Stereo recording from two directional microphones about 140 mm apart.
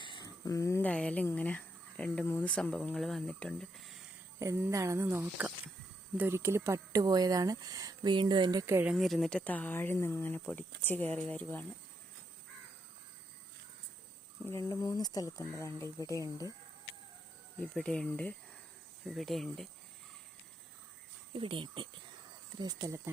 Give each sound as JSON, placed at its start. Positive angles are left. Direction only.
{"t": 0.0, "sound": "a sound", "side_deg": 30}
{"t": 0.8, "sound": "speech", "side_deg": 10}
{"t": 4.4, "sound": "speech", "side_deg": -20}
{"t": 8.9, "sound": "speech", "side_deg": 0}
{"t": 14.4, "sound": "speech", "side_deg": 25}
{"t": 17.6, "sound": "speech", "side_deg": 5}
{"t": 21.3, "sound": "speech", "side_deg": -40}